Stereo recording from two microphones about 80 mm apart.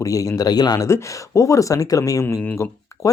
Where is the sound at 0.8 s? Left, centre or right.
Left.